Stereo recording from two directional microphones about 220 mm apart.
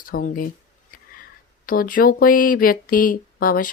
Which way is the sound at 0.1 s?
40° left (ahead or behind).